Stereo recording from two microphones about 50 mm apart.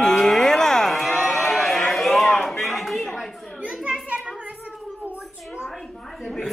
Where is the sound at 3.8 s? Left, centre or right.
Right.